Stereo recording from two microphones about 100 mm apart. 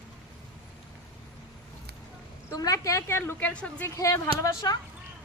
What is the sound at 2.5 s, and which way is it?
A woman's voice, 35° left (ahead or behind).